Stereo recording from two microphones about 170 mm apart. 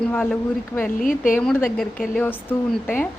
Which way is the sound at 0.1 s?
10° left (ahead or behind).